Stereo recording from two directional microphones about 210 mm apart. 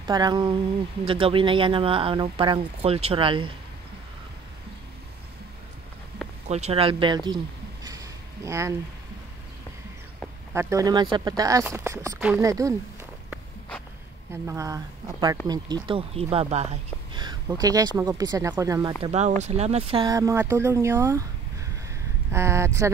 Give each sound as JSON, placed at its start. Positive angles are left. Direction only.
{"t": 0.0, "sound": "speech", "side_deg": -20}
{"t": 6.4, "sound": "speech", "side_deg": -30}
{"t": 7.8, "sound": "a sound", "side_deg": -15}
{"t": 10.5, "sound": "speech", "side_deg": -15}
{"t": 14.3, "sound": "speech", "side_deg": -10}
{"t": 19.0, "sound": "speech", "side_deg": -30}
{"t": 22.3, "sound": "speech", "side_deg": -15}